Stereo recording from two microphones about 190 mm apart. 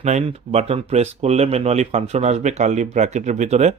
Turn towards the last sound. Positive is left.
turn(degrees=-35)  # may be behind; listen again after turning